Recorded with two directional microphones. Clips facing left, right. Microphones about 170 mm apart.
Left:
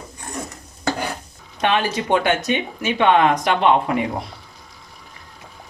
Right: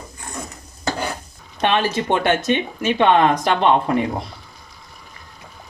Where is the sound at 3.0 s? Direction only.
30° right (ahead or behind).